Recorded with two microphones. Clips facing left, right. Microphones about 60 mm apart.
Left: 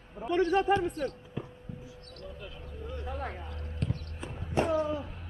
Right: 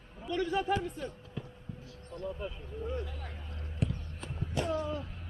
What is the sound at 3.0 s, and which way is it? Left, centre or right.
Speech, left.